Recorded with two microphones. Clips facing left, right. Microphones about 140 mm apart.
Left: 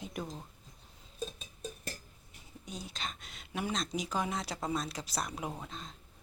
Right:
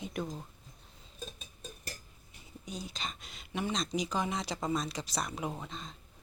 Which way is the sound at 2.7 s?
Centre (ahead or behind).